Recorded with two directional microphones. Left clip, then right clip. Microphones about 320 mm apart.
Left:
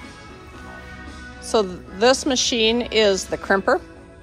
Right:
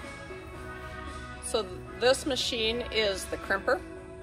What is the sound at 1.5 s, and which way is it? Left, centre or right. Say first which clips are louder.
Speech: left 11 dB; left.